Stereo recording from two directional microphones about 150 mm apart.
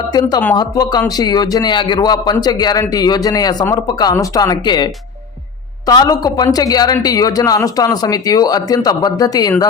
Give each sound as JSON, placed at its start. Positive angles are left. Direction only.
{"t": 0.1, "sound": "speech", "side_deg": 25}